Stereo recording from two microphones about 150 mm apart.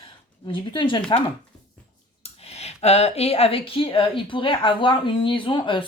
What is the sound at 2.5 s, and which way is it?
Speech, 45° left (ahead or behind).